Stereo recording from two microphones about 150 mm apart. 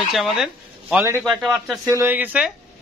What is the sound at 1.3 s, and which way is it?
Speech, centre (ahead or behind).